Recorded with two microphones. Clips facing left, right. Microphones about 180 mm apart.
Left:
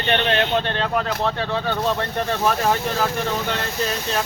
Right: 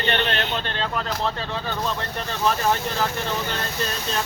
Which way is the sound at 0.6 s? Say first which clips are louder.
Left 5 dB; 55° left (ahead or behind).